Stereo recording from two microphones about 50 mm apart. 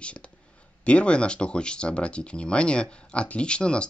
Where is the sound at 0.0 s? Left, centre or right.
Left.